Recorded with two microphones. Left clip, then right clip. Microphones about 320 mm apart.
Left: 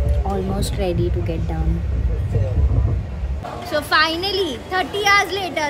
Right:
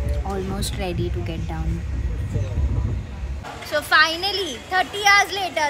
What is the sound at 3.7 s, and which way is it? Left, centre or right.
A child's voice, centre.